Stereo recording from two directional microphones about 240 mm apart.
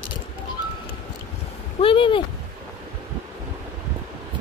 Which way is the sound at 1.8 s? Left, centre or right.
Left.